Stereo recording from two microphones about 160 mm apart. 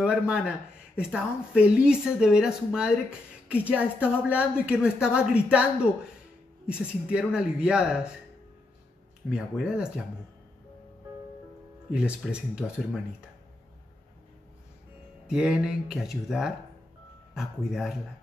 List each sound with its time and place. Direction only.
0.0 s speech: 5° right (ahead or behind)
6.7 s speech: 5° right (ahead or behind)
9.3 s speech: 5° right (ahead or behind)
11.9 s speech: 5° right (ahead or behind)
15.2 s speech: 5° right (ahead or behind)